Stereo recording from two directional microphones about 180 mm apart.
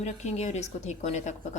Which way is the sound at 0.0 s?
40° left (ahead or behind).